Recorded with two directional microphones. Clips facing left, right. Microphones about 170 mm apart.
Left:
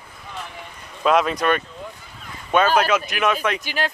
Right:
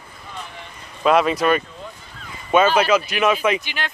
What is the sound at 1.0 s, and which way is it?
Speech, centre (ahead or behind).